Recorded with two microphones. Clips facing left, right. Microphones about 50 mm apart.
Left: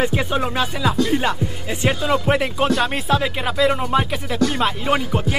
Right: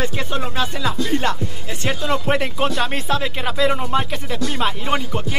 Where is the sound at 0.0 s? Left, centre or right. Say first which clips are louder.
Left 4 dB; centre.